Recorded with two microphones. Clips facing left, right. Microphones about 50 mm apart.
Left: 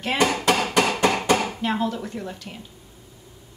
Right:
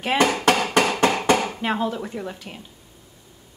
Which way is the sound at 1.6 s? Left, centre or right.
Centre.